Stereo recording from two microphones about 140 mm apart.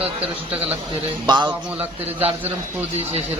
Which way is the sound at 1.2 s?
30° right (ahead or behind).